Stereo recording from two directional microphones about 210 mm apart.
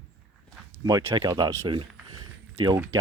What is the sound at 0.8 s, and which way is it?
Speech, 20° right (ahead or behind).